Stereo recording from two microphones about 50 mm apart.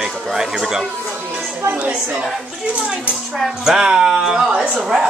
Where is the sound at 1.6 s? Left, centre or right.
Right.